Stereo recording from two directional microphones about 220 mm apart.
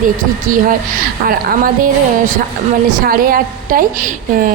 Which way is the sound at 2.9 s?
40° right (ahead or behind).